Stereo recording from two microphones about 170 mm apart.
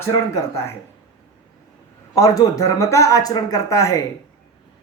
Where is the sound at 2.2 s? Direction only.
20° left (ahead or behind).